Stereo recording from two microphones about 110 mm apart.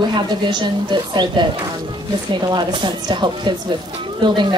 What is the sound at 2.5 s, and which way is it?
A woman's voice, 45° right (ahead or behind).